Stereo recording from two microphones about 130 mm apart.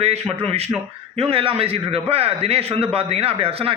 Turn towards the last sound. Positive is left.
turn(degrees=-50)  # may be behind; listen again after turning